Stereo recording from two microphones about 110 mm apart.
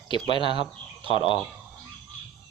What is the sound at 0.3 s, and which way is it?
Speech, 50° left (ahead or behind).